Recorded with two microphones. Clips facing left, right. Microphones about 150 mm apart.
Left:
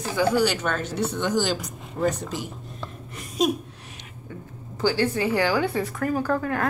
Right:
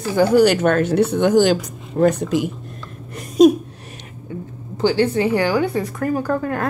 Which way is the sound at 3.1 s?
45° right (ahead or behind).